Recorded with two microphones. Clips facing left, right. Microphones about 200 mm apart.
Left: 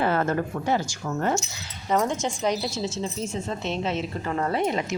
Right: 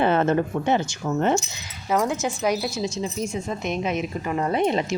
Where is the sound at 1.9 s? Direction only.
5° right (ahead or behind).